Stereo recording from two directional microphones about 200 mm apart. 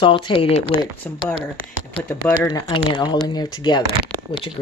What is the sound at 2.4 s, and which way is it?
Speech, 15° left (ahead or behind).